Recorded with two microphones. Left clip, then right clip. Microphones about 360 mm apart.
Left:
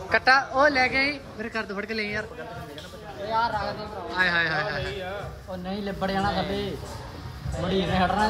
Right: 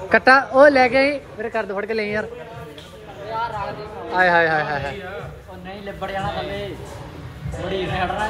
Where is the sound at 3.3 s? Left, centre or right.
Left.